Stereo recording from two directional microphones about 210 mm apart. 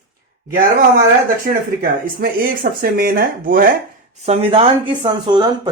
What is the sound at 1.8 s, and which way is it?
Speech, 45° right (ahead or behind).